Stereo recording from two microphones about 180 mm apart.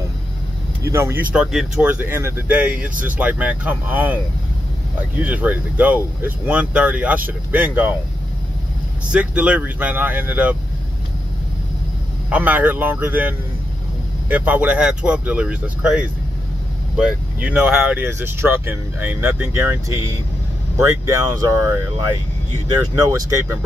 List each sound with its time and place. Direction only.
0.8 s speech: 15° right (ahead or behind)
5.2 s speech: 10° right (ahead or behind)
9.1 s speech: 5° right (ahead or behind)
12.3 s speech: 10° right (ahead or behind)
14.3 s speech: 10° right (ahead or behind)